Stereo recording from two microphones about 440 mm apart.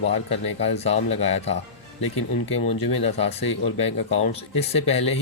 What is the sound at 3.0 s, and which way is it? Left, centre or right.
Speech, centre.